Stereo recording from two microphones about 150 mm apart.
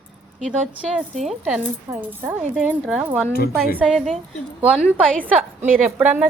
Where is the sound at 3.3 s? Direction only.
90° left.